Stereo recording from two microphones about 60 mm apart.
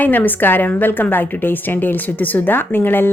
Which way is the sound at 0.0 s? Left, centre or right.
Left.